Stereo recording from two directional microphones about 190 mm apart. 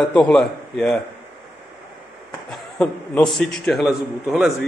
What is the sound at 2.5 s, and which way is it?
A man's voice, 5° left (ahead or behind).